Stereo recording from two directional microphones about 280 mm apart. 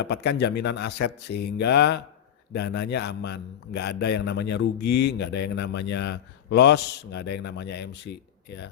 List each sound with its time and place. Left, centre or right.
0.0 s a man's voice: left